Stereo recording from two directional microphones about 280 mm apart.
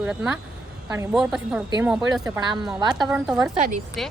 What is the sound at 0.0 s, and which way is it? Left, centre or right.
Speech, centre.